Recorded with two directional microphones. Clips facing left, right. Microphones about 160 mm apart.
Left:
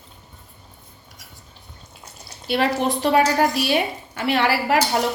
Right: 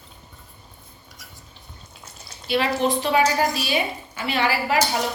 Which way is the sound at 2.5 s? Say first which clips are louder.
Left 1 dB; 60° left (ahead or behind).